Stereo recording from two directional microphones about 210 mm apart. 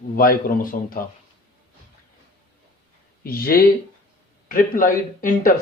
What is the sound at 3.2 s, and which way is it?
Speech, 45° left (ahead or behind).